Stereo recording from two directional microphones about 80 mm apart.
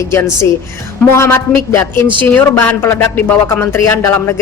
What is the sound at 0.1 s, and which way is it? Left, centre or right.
A woman's voice, left.